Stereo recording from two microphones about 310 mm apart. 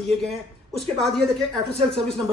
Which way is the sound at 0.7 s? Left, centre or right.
Centre.